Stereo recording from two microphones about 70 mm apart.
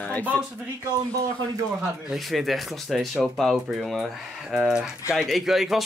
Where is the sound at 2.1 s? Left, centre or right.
Centre.